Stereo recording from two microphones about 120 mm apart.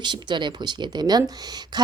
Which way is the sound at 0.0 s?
40° right (ahead or behind).